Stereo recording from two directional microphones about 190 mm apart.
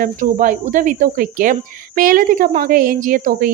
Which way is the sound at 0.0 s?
45° right (ahead or behind).